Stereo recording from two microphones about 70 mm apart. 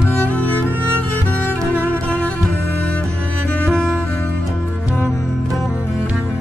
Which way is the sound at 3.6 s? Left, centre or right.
Centre.